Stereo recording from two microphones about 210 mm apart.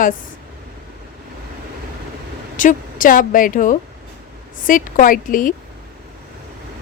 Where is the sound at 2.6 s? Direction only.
40° left (ahead or behind).